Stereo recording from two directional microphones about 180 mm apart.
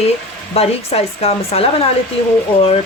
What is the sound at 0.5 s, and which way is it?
Speech, 35° left (ahead or behind).